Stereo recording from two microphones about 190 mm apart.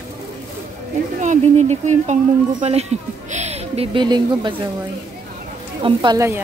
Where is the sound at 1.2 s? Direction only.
40° right (ahead or behind); by 4.6 s 25° right (ahead or behind).